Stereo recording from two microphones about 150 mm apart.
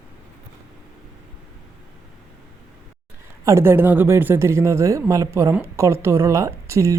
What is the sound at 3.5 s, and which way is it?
Speech, 15° right (ahead or behind).